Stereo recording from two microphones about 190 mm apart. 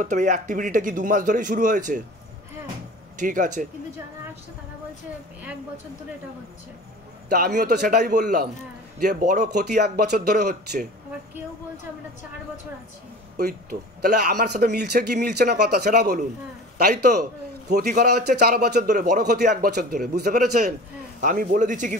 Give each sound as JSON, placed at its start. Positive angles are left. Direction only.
{"t": 0.0, "sound": "a man's voice", "side_deg": -40}
{"t": 3.2, "sound": "a man's voice", "side_deg": -40}
{"t": 7.2, "sound": "a man's voice", "side_deg": -55}
{"t": 9.8, "sound": "a man's voice", "side_deg": -55}
{"t": 13.4, "sound": "a man's voice", "side_deg": -55}
{"t": 17.1, "sound": "a man's voice", "side_deg": -40}
{"t": 17.7, "sound": "a man's voice", "side_deg": -55}